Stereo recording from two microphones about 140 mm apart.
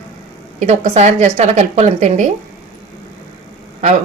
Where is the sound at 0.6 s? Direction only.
55° right (ahead or behind).